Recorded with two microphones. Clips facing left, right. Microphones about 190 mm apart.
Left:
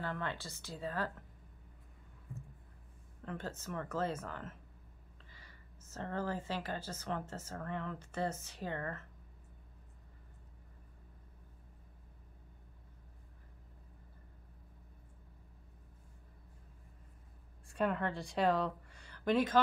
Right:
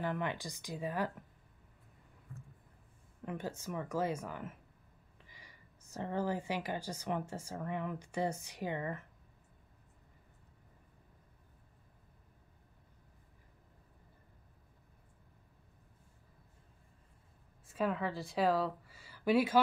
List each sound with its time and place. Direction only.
0.0 s speech: 15° right (ahead or behind)
3.3 s speech: 15° right (ahead or behind)
17.6 s speech: centre (ahead or behind)